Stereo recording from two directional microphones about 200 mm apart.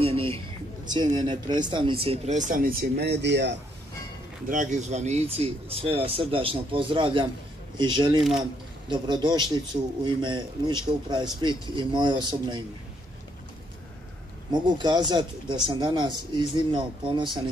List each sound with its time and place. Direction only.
0.0 s a sound: 30° right (ahead or behind)
0.8 s speech: 20° right (ahead or behind); by 3.5 s 60° right (ahead or behind)
4.5 s speech: 40° right (ahead or behind); by 8.2 s 20° right (ahead or behind)
8.2 s speech: centre (ahead or behind)
8.8 s speech: 20° right (ahead or behind)
14.5 s speech: 20° right (ahead or behind)